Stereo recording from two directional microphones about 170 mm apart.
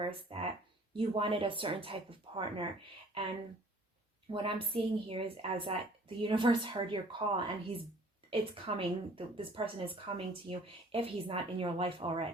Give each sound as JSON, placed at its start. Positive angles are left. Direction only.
{"t": 0.0, "sound": "a woman's voice", "side_deg": -30}
{"t": 4.3, "sound": "a woman's voice", "side_deg": -30}